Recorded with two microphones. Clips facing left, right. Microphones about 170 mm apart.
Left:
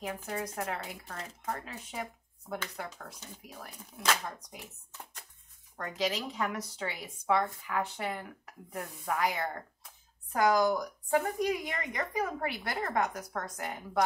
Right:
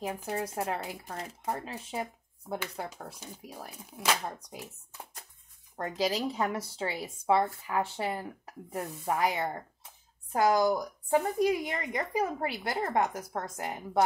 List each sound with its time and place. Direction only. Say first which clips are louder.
0.2 s a woman's voice: right 3 dB; 30° right (ahead or behind)
3.5 s speech: right 3 dB; 5° right (ahead or behind)
5.8 s a woman's voice: right 3 dB; 35° right (ahead or behind)